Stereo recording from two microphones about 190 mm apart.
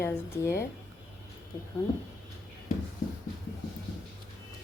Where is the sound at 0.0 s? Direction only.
15° left (ahead or behind).